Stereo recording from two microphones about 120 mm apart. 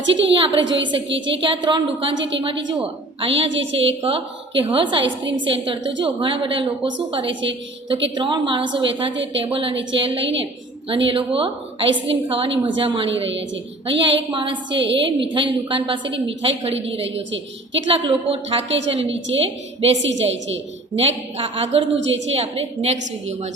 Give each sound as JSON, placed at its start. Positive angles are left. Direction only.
{"t": 0.3, "sound": "a woman's voice", "side_deg": -45}